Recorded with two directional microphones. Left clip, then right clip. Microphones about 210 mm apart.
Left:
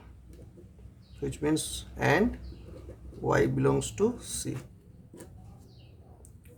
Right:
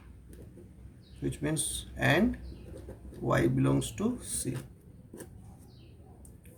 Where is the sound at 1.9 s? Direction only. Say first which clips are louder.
Left 2 dB; 35° left (ahead or behind).